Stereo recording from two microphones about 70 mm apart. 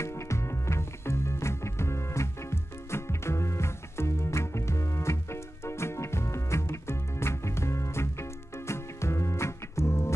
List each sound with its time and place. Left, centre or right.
0.0 s music: left